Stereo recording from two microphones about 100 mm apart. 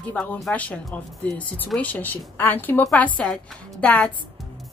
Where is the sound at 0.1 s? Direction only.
15° left (ahead or behind).